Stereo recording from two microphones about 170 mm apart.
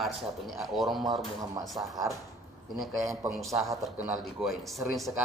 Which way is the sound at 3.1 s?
20° right (ahead or behind).